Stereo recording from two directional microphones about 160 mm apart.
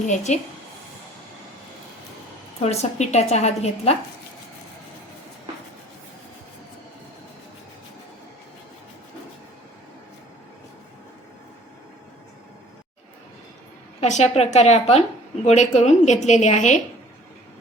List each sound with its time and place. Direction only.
0.3 s a woman's voice: 45° left (ahead or behind)
2.6 s a woman's voice: 45° left (ahead or behind)
14.0 s a woman's voice: 45° left (ahead or behind)